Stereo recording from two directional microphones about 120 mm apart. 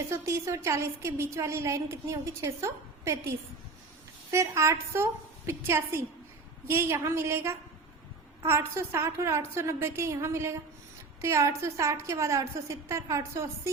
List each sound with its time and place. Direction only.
0.1 s a woman's voice: 25° right (ahead or behind)